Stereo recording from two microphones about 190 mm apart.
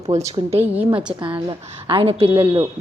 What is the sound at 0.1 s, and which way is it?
Speech, 40° right (ahead or behind).